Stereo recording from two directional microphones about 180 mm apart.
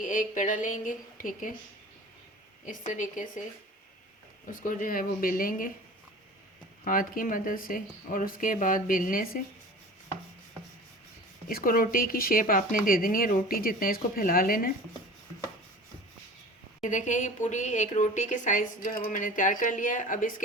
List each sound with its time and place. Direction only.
0.0 s speech: 45° left (ahead or behind)
2.6 s speech: 45° left (ahead or behind)
4.6 s speech: 50° left (ahead or behind)
6.8 s speech: 50° left (ahead or behind)
11.4 s speech: 50° left (ahead or behind)
16.8 s speech: 45° left (ahead or behind)